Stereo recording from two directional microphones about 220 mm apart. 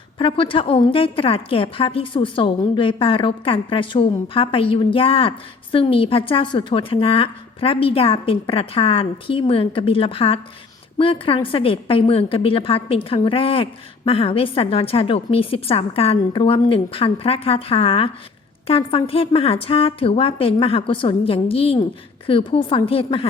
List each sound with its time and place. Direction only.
0.2 s a woman's voice: 25° left (ahead or behind)